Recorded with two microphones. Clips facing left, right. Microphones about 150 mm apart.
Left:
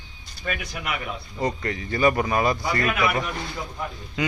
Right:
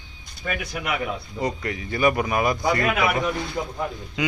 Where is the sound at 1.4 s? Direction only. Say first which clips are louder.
Left 2 dB; 10° right (ahead or behind).